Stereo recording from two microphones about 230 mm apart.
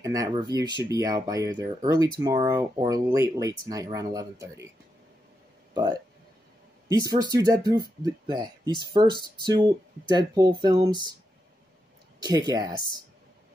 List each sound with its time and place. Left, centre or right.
0.0 s speech: centre
6.9 s speech: centre
12.3 s speech: centre